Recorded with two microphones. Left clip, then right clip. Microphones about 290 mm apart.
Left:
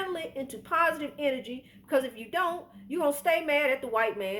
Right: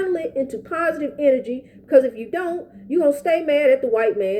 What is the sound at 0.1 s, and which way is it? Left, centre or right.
A woman's voice, centre.